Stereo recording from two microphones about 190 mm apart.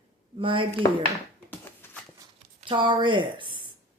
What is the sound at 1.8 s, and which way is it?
Horse, 10° left (ahead or behind).